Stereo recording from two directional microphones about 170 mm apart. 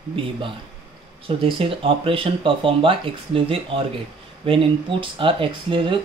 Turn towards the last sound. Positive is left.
turn(degrees=-30)  # may be behind; listen again after turning